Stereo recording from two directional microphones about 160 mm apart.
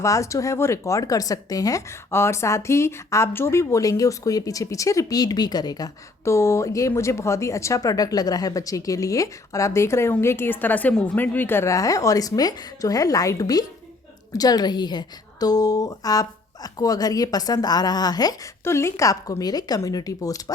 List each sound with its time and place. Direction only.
0.0 s speech: 20° left (ahead or behind)